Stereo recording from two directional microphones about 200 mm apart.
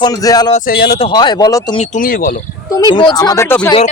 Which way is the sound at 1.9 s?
45° left (ahead or behind).